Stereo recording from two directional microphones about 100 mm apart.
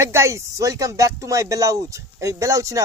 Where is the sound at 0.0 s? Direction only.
25° right (ahead or behind).